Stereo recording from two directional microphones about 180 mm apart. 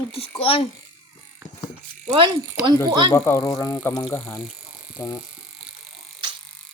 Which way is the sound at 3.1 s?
15° left (ahead or behind).